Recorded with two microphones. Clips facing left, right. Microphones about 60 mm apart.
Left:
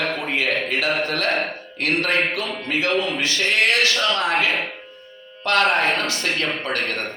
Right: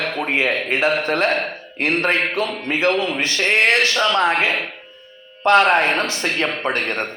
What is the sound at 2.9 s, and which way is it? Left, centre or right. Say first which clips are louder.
Speech: right 3 dB; centre.